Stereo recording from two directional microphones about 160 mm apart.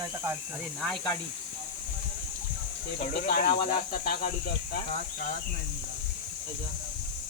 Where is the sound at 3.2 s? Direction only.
60° left (ahead or behind).